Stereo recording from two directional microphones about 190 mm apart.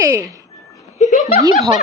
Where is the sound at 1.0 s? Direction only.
40° left (ahead or behind).